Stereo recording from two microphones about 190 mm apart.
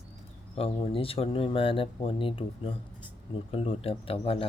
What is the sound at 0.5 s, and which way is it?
Speech, 30° left (ahead or behind).